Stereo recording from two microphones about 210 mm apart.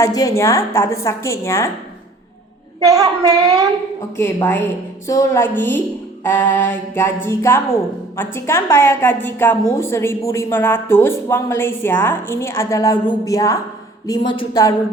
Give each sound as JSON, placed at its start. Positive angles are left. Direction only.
{"t": 0.0, "sound": "a woman's voice", "side_deg": 15}
{"t": 2.8, "sound": "a woman's voice", "side_deg": -15}
{"t": 4.2, "sound": "a woman's voice", "side_deg": 10}